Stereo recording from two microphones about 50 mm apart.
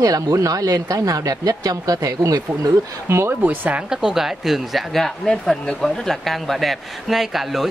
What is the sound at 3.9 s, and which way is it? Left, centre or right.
Speech, centre.